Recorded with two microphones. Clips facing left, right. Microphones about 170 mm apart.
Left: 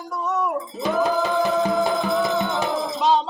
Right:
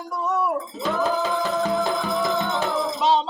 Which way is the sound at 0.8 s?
15° left (ahead or behind).